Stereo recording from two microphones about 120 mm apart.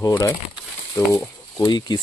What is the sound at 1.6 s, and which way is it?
Speech, 35° left (ahead or behind).